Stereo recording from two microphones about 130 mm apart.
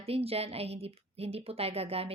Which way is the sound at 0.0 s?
50° right (ahead or behind).